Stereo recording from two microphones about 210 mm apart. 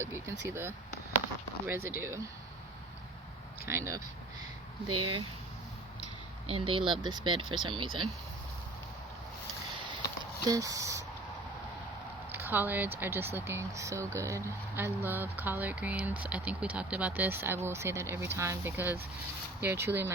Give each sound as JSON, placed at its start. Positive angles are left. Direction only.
{"t": 0.0, "sound": "speech", "side_deg": -10}
{"t": 3.7, "sound": "speech", "side_deg": -15}
{"t": 4.9, "sound": "speech", "side_deg": -25}
{"t": 6.5, "sound": "speech", "side_deg": -25}
{"t": 10.5, "sound": "speech", "side_deg": -15}
{"t": 12.3, "sound": "speech", "side_deg": -10}